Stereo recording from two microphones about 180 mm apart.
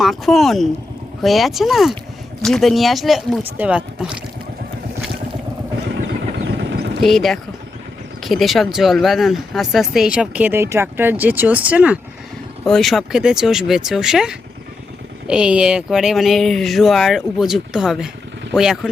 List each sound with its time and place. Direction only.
0.0 s speech: centre (ahead or behind)
6.3 s vehicle: 75° right (ahead or behind)
7.0 s speech: centre (ahead or behind)